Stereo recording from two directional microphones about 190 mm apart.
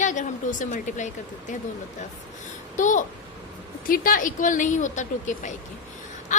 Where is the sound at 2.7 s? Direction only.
40° left (ahead or behind).